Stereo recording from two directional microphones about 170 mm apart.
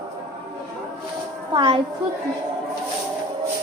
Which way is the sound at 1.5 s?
30° right (ahead or behind).